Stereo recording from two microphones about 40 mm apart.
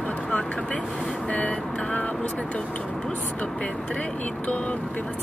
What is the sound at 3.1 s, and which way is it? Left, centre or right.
Speech, left.